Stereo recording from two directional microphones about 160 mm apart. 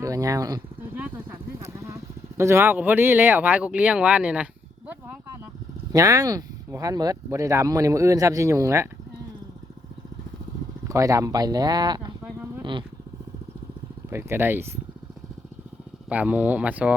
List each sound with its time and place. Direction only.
0.0 s speech: 20° right (ahead or behind)
0.8 s speech: 10° right (ahead or behind)
5.9 s speech: 20° right (ahead or behind)
10.8 s speech: 20° right (ahead or behind)
14.1 s speech: 15° right (ahead or behind)
16.0 s speech: 10° right (ahead or behind)